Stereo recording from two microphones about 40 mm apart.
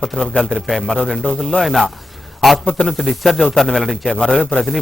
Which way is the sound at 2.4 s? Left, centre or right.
Centre.